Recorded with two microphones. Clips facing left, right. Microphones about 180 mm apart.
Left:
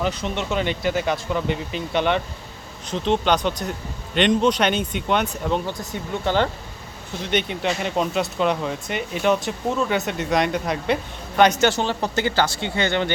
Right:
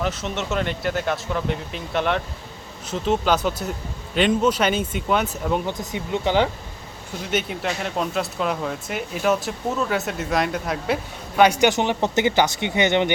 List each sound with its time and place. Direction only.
0.0 s a man's voice: centre (ahead or behind); by 13.1 s 20° right (ahead or behind)